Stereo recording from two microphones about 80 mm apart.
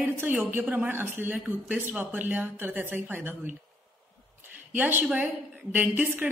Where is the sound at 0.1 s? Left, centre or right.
Right.